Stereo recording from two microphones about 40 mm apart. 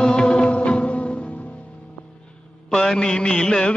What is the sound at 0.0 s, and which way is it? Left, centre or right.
Music, centre.